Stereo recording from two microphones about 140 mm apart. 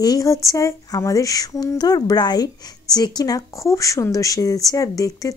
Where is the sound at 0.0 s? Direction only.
25° left (ahead or behind).